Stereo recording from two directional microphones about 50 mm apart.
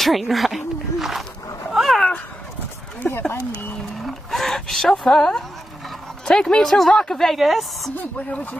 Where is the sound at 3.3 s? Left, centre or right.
Left.